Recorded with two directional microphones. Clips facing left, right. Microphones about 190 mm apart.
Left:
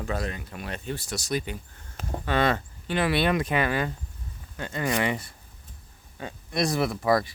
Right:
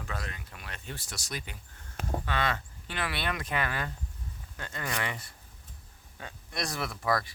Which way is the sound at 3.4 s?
20° left (ahead or behind).